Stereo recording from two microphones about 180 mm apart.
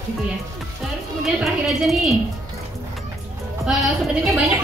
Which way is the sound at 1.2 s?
Centre (ahead or behind).